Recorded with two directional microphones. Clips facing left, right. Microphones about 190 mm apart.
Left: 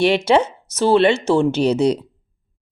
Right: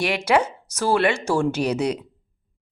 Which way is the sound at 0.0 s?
25° left (ahead or behind).